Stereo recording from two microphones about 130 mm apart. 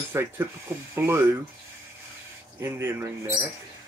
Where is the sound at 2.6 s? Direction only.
20° right (ahead or behind).